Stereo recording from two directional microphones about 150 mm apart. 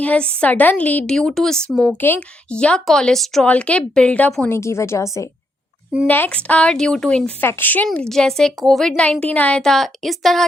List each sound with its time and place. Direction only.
0.0 s a woman's voice: 10° left (ahead or behind)
4.4 s a woman's voice: 15° left (ahead or behind); by 10.4 s centre (ahead or behind)